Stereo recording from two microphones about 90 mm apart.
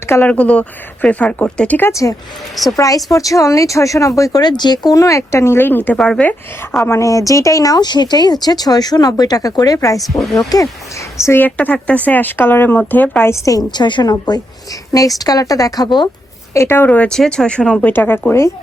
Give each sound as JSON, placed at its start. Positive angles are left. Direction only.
{"t": 0.3, "sound": "speech", "side_deg": 15}
{"t": 1.9, "sound": "speech", "side_deg": 35}
{"t": 6.0, "sound": "speech", "side_deg": 10}
{"t": 7.0, "sound": "speech", "side_deg": 40}
{"t": 10.0, "sound": "speech", "side_deg": 0}
{"t": 10.5, "sound": "speech", "side_deg": 45}
{"t": 11.2, "sound": "speech", "side_deg": 25}
{"t": 16.6, "sound": "speech", "side_deg": 25}
{"t": 17.1, "sound": "speech", "side_deg": 5}
{"t": 17.9, "sound": "speech", "side_deg": 20}